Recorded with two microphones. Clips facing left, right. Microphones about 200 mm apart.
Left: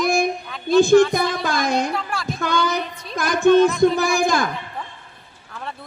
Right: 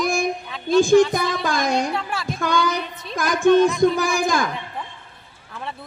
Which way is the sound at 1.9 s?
5° right (ahead or behind).